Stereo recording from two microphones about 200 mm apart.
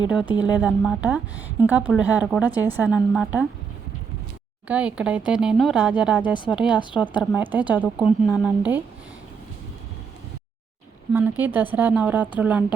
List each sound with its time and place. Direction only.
0.6 s speech: 5° right (ahead or behind)
4.7 s speech: 5° right (ahead or behind)
6.2 s speech: 20° left (ahead or behind)
6.5 s speech: 5° right (ahead or behind)
11.1 s speech: 10° right (ahead or behind)